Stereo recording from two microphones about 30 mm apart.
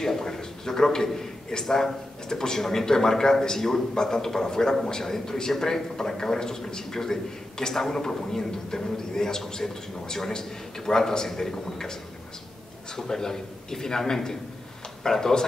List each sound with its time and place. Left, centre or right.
0.0 s a man's voice: centre